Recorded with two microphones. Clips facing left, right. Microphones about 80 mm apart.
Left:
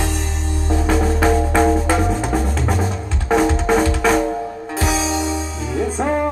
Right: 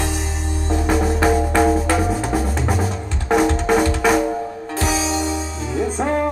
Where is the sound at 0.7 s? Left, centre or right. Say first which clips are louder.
Left 1 dB; centre.